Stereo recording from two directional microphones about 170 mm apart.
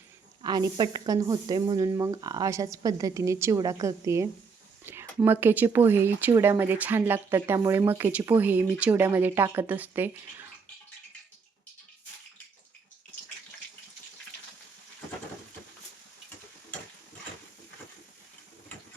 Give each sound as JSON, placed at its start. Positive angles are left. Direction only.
{"t": 0.4, "sound": "speech", "side_deg": -25}